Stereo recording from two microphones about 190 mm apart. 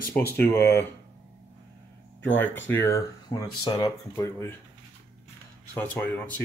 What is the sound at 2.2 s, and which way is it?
Speech, 10° left (ahead or behind).